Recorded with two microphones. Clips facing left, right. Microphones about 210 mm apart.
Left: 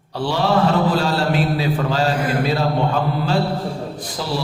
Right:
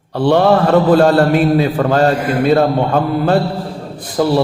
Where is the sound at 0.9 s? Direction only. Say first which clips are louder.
Right 9 dB; 55° right (ahead or behind).